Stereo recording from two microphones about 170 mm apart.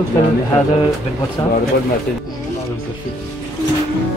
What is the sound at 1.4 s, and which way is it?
Speech, 25° left (ahead or behind).